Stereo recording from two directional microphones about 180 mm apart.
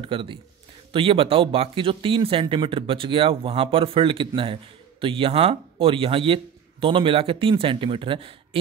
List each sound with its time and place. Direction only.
0.0 s speech: 30° right (ahead or behind)